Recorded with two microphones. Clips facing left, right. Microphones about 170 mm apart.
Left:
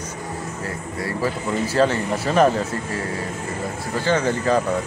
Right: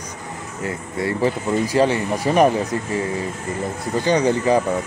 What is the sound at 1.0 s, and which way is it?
Speech, 20° right (ahead or behind).